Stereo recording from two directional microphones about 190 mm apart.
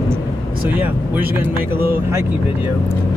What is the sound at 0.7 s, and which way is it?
Speech, 10° right (ahead or behind).